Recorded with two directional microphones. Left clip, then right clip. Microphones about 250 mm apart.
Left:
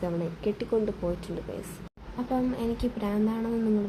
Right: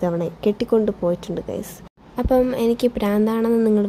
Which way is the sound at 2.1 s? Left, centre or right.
Right.